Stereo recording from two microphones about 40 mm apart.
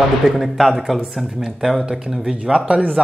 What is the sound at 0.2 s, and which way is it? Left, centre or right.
Speech, centre.